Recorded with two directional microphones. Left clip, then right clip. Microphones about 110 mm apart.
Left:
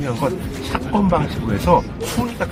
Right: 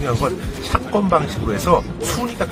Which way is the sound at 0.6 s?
30° right (ahead or behind).